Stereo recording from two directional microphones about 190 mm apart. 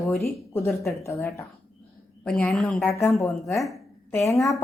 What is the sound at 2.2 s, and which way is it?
A woman's voice, 5° left (ahead or behind).